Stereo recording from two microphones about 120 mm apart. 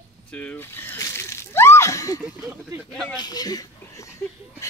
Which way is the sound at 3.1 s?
35° left (ahead or behind).